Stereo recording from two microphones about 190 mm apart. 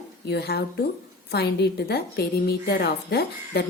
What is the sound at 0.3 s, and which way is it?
A woman's voice, 60° left (ahead or behind).